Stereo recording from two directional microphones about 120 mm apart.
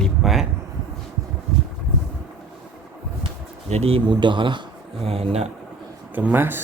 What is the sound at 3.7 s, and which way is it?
Speech, 60° right (ahead or behind).